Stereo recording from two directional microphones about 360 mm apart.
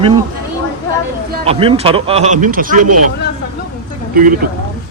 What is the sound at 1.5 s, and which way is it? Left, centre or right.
Speech, centre.